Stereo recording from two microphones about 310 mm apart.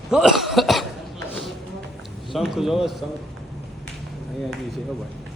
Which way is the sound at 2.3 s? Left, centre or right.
Centre.